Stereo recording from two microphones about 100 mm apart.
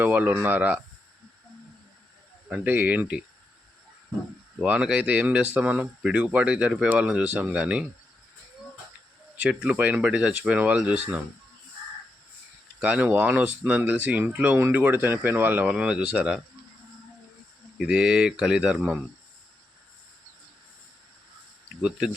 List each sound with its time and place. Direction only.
0.0 s speech: 15° right (ahead or behind)
2.5 s speech: 15° right (ahead or behind)
4.6 s speech: 10° right (ahead or behind)
9.4 s speech: 10° right (ahead or behind)
12.8 s speech: 15° right (ahead or behind)
17.7 s speech: 5° right (ahead or behind)
21.8 s speech: 10° right (ahead or behind)